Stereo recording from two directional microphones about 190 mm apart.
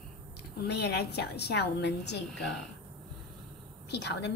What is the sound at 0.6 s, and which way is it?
A woman's voice, 60° left (ahead or behind).